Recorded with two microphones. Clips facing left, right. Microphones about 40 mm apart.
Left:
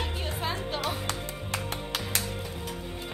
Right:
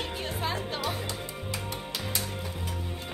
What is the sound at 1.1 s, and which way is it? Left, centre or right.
Music, left.